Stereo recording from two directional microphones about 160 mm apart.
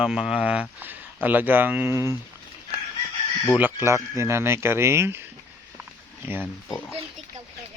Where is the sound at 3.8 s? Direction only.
15° right (ahead or behind).